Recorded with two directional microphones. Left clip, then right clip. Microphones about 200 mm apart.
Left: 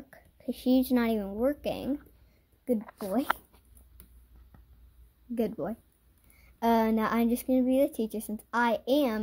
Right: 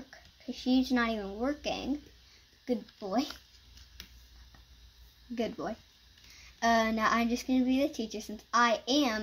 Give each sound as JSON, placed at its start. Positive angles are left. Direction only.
{"t": 0.5, "sound": "speech", "side_deg": 55}
{"t": 5.3, "sound": "speech", "side_deg": 65}